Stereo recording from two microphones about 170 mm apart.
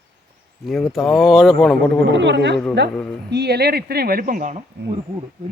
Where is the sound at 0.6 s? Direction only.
Centre (ahead or behind).